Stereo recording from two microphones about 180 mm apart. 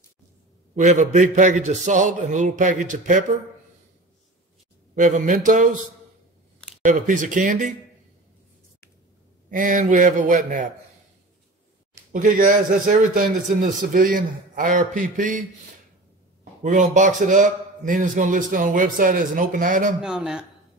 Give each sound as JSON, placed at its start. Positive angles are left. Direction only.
{"t": 0.7, "sound": "a man's voice", "side_deg": -40}
{"t": 4.9, "sound": "a man's voice", "side_deg": -45}
{"t": 6.8, "sound": "a man's voice", "side_deg": -45}
{"t": 9.5, "sound": "a man's voice", "side_deg": -45}
{"t": 12.1, "sound": "a man's voice", "side_deg": -50}
{"t": 16.6, "sound": "a man's voice", "side_deg": -45}
{"t": 20.0, "sound": "a man's voice", "side_deg": -5}